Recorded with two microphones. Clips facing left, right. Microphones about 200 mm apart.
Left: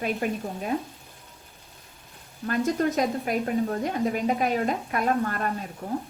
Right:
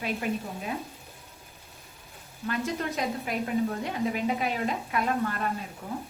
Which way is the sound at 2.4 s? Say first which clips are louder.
Left 6 dB; 45° left (ahead or behind).